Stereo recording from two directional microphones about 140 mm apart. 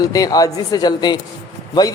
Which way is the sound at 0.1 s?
25° left (ahead or behind).